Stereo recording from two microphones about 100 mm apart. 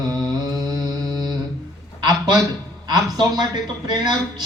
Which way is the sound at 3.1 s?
45° right (ahead or behind).